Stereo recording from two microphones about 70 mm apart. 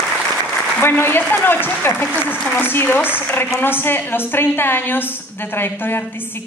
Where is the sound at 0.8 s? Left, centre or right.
Left.